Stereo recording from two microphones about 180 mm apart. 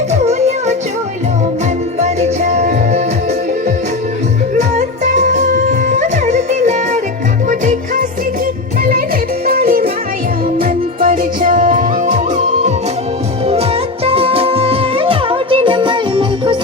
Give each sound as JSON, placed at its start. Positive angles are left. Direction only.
{"t": 0.1, "sound": "music", "side_deg": -40}
{"t": 2.0, "sound": "music", "side_deg": -40}
{"t": 5.1, "sound": "music", "side_deg": -40}
{"t": 6.2, "sound": "music", "side_deg": -40}
{"t": 13.5, "sound": "music", "side_deg": -35}